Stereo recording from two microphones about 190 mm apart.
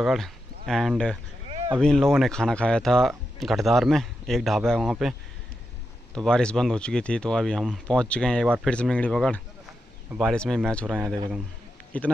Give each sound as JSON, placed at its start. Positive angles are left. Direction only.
{"t": 0.0, "sound": "speech", "side_deg": 0}
{"t": 6.1, "sound": "speech", "side_deg": 5}